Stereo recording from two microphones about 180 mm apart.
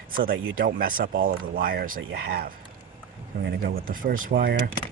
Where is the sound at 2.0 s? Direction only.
75° right (ahead or behind).